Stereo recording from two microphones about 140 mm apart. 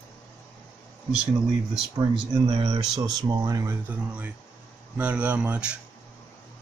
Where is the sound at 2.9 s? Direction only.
30° right (ahead or behind).